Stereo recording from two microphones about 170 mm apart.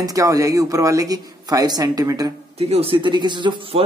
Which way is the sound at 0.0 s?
20° right (ahead or behind).